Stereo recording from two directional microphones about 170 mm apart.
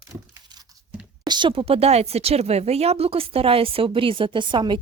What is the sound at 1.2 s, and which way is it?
Speech, 25° right (ahead or behind).